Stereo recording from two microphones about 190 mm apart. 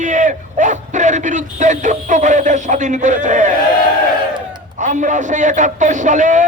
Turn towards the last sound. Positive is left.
turn(degrees=-40)  # may be behind; listen again after turning